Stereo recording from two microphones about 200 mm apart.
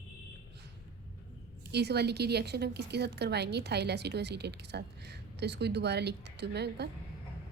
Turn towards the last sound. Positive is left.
turn(degrees=-55)  # may be behind; listen again after turning